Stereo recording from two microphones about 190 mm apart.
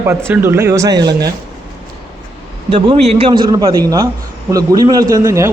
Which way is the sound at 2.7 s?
30° right (ahead or behind).